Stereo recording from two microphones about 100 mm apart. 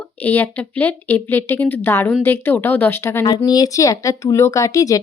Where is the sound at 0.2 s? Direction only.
20° left (ahead or behind).